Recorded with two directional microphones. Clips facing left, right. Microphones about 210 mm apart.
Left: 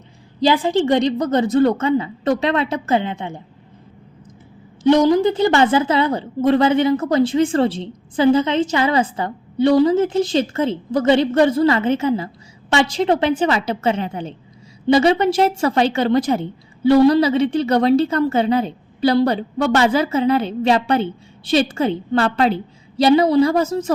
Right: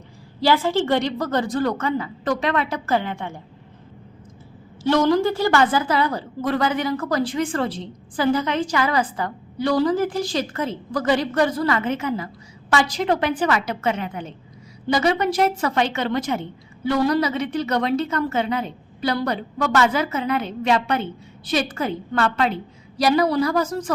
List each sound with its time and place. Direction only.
0.3 s a woman's voice: 15° left (ahead or behind)
4.8 s a woman's voice: 15° left (ahead or behind)